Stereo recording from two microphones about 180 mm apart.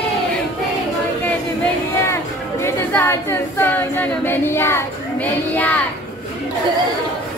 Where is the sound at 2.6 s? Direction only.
15° left (ahead or behind).